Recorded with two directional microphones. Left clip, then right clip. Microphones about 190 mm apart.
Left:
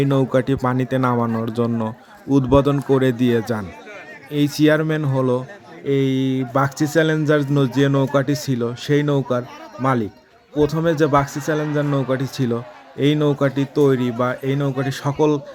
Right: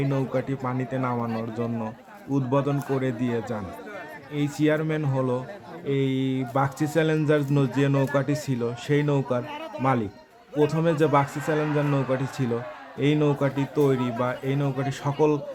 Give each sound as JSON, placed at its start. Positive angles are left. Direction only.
{"t": 0.0, "sound": "speech", "side_deg": 40}